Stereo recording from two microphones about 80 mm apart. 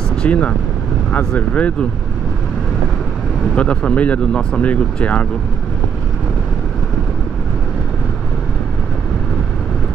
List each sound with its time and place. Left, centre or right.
0.2 s speech: centre
3.5 s speech: centre